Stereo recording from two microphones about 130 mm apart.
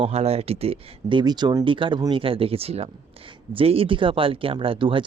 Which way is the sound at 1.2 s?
35° right (ahead or behind).